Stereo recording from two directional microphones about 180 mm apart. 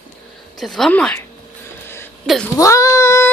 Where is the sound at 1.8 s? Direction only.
10° left (ahead or behind).